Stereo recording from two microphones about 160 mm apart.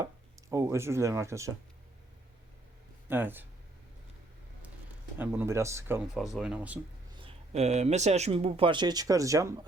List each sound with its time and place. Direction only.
0.5 s speech: 20° right (ahead or behind)
3.1 s speech: 10° right (ahead or behind)
5.1 s speech: 10° right (ahead or behind)
6.3 s speech: 5° right (ahead or behind)
7.2 s speech: 40° right (ahead or behind); by 9.6 s 20° right (ahead or behind)